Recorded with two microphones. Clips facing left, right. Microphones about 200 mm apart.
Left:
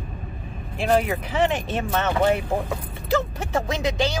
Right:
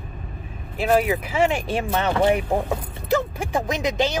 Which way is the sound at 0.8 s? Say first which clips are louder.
Right 1 dB; 10° right (ahead or behind).